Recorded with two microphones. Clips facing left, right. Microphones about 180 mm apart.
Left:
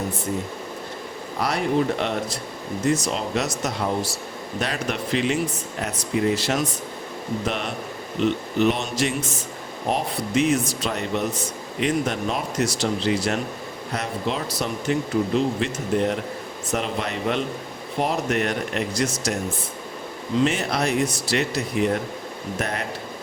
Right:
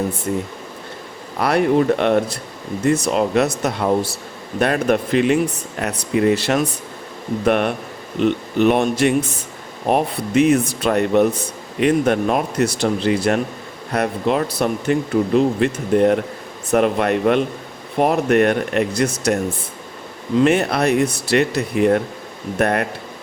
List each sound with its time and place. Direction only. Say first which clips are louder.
1.4 s speech: right 6 dB; 60° right (ahead or behind)
5.8 s speech: right 5 dB; 65° right (ahead or behind)
20.4 s speech: right 7 dB; 60° right (ahead or behind)